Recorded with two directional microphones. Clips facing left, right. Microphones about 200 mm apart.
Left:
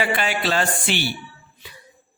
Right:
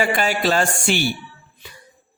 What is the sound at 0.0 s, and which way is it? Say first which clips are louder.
Speech: right 3 dB; 40° right (ahead or behind).